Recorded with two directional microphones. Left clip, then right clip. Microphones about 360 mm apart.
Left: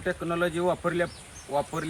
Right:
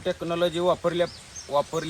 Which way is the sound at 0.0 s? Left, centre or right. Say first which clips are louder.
Right 2 dB; centre.